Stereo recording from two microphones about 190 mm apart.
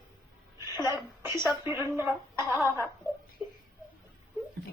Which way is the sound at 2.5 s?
10° right (ahead or behind).